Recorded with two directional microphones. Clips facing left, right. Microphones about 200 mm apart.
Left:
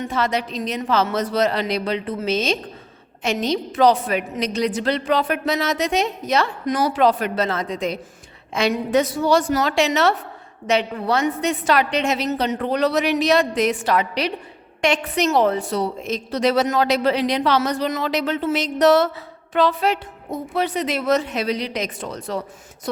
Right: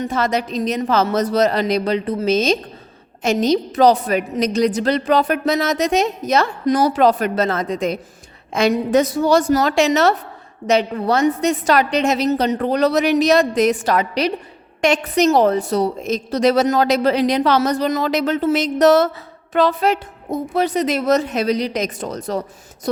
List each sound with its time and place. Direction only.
0.0 s a woman's voice: 45° right (ahead or behind)